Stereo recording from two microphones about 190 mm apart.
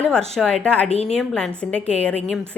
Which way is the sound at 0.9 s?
35° left (ahead or behind).